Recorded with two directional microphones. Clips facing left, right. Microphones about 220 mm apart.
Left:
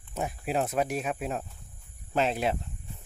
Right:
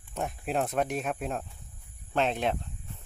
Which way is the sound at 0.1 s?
Centre (ahead or behind).